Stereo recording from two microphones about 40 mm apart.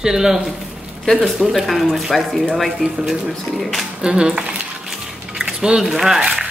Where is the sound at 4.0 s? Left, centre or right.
Right.